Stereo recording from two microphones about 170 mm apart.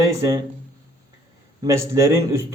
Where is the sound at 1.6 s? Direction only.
15° right (ahead or behind).